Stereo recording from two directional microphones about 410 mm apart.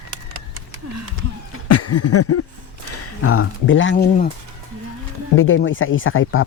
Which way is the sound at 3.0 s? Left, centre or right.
Left.